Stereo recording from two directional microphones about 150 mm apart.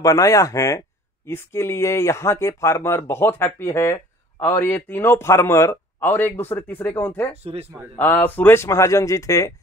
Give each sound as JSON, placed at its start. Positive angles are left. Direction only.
{"t": 0.0, "sound": "speech", "side_deg": 20}
{"t": 7.4, "sound": "speech", "side_deg": -40}
{"t": 8.0, "sound": "speech", "side_deg": 10}